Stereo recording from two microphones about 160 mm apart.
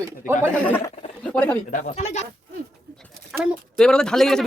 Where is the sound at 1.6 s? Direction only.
50° left (ahead or behind).